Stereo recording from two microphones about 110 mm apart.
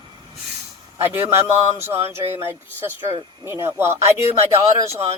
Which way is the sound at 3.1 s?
25° right (ahead or behind).